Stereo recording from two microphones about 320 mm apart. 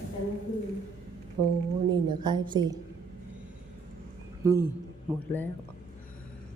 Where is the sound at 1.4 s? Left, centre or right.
Right.